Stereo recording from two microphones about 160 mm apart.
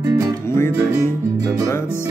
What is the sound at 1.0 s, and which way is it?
Music, 20° right (ahead or behind).